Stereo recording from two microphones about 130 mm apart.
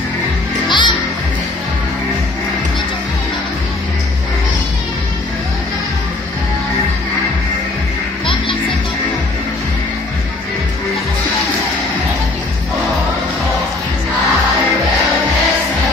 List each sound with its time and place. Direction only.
0.7 s music: 35° left (ahead or behind)